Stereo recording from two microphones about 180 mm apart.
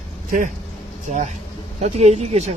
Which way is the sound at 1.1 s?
40° right (ahead or behind).